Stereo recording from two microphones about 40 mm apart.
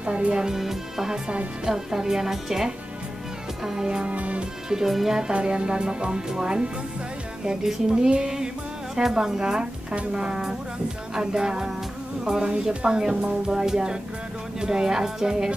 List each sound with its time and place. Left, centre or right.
0.0 s speech: right
0.4 s speech: centre
4.1 s speech: right
4.6 s speech: centre
5.3 s speech: right